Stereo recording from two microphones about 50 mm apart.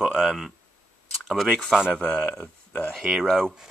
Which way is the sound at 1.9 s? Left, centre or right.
Centre.